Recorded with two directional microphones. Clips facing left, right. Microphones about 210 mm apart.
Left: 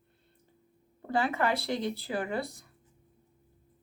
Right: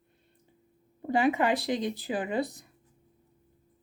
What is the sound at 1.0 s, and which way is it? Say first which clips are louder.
Speech: right 4 dB; 15° right (ahead or behind).